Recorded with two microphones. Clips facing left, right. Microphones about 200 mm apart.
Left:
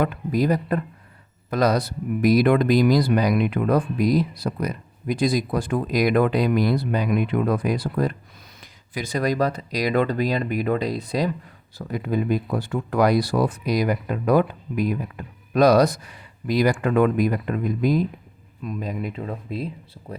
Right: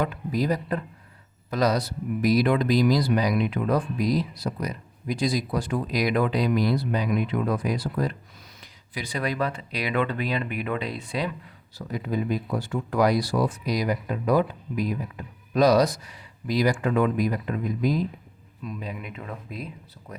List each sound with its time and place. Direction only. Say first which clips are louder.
0.0 s speech: left 4 dB; 55° left (ahead or behind)
18.6 s speech: left 6 dB; 45° left (ahead or behind); by 20.1 s 30° left (ahead or behind)